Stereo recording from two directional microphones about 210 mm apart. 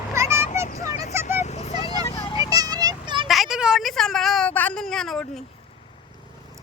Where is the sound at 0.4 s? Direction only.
35° left (ahead or behind).